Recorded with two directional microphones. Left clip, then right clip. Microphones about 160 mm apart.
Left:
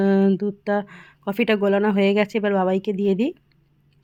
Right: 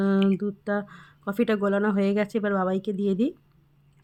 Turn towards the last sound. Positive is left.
turn(degrees=10)  # may be behind; listen again after turning